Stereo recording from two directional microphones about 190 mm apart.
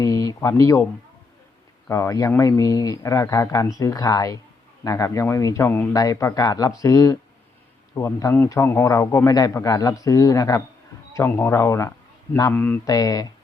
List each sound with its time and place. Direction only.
0.0 s speech: 20° left (ahead or behind)
1.9 s a man's voice: 15° left (ahead or behind)